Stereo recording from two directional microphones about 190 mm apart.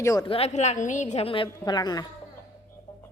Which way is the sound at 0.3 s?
30° left (ahead or behind).